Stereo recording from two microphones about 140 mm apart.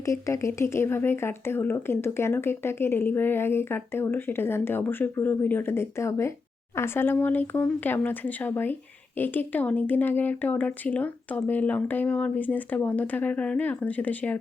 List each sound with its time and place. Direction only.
0.0 s speech: 20° left (ahead or behind)